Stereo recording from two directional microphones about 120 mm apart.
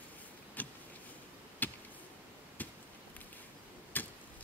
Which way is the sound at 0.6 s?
15° left (ahead or behind).